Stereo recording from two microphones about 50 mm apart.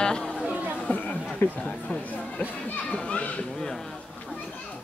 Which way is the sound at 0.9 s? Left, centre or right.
Left.